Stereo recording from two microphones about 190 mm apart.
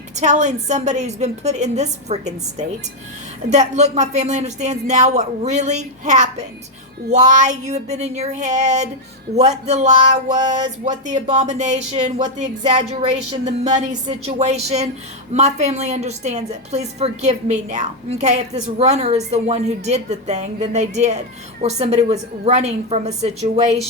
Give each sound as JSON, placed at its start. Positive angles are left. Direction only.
{"t": 0.2, "sound": "a woman's voice", "side_deg": -40}